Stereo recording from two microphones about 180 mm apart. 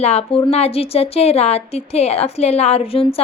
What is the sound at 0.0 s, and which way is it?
A woman's voice, 35° left (ahead or behind).